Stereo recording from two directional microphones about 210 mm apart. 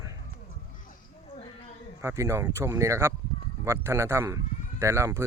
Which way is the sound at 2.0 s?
15° right (ahead or behind).